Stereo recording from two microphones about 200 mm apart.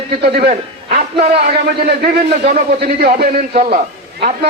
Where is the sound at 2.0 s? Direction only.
45° right (ahead or behind).